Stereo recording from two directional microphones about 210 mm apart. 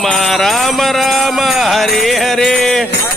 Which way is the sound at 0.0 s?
Centre (ahead or behind).